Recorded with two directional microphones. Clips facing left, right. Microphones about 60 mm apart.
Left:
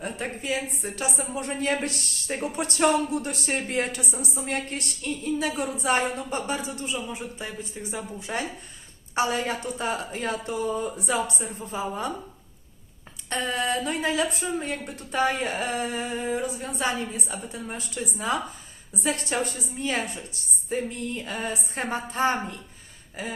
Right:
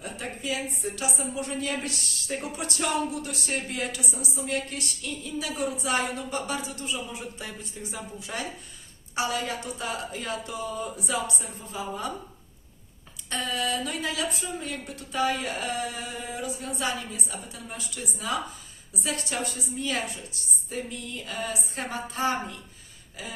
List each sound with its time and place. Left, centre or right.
0.0 s speech: left
6.5 s speech: left
13.3 s speech: left
20.7 s speech: left